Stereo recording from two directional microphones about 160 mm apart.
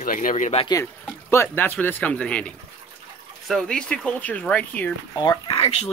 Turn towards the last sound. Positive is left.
turn(degrees=30)  # may be behind; listen again after turning